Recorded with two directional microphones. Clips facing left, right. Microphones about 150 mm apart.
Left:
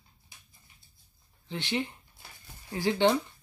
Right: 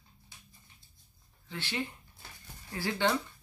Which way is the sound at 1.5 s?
20° left (ahead or behind).